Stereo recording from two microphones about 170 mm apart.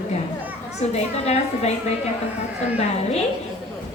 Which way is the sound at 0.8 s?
40° left (ahead or behind).